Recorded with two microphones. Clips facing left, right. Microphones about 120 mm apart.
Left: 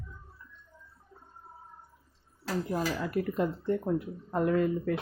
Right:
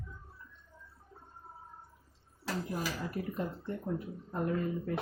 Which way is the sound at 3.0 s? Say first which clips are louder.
Left 7 dB; 90° left.